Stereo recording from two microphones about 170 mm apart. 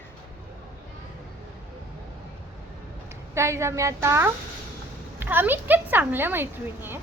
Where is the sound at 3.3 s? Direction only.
15° right (ahead or behind).